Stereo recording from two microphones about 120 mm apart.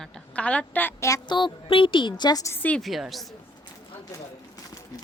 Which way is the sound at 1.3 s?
45° left (ahead or behind).